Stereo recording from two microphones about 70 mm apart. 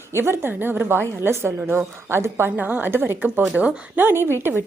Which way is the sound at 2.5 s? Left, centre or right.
Right.